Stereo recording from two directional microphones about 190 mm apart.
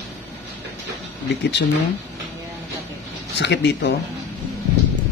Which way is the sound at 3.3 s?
65° left (ahead or behind).